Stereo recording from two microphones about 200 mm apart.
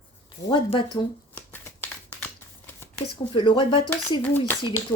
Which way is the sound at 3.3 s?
25° left (ahead or behind).